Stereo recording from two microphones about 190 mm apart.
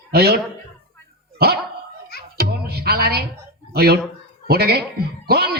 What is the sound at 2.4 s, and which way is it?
Music, 55° right (ahead or behind).